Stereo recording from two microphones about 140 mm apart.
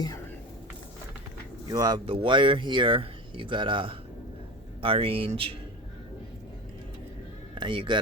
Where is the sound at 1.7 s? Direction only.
30° right (ahead or behind).